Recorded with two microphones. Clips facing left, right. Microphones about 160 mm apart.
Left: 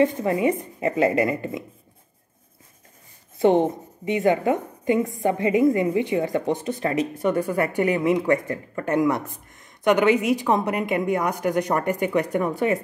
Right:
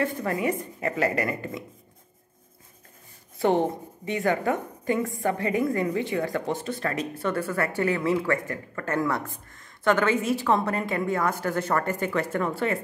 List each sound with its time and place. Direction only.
0.0 s a woman's voice: 20° left (ahead or behind)
3.3 s a woman's voice: 20° left (ahead or behind)